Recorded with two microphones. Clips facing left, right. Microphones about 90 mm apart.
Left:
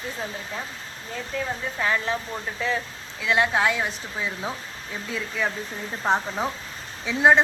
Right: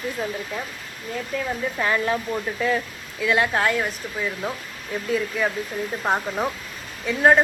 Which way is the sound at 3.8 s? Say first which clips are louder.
Right 2 dB; centre (ahead or behind).